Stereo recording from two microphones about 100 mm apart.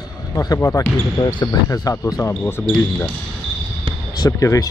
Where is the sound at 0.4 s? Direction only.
35° left (ahead or behind).